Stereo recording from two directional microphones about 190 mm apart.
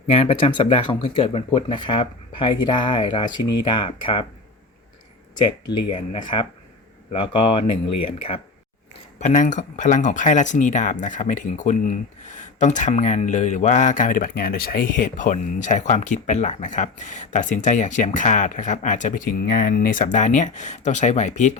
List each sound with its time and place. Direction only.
0.1 s speech: 30° left (ahead or behind)
5.3 s speech: 25° left (ahead or behind)
9.1 s speech: 40° left (ahead or behind)